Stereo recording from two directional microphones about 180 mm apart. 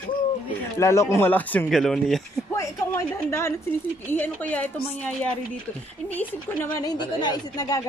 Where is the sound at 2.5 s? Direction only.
15° left (ahead or behind).